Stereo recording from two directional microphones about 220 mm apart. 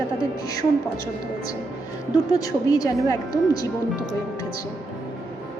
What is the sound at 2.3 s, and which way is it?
A woman's voice, 15° left (ahead or behind).